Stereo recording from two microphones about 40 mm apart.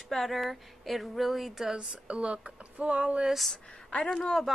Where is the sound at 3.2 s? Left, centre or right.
Centre.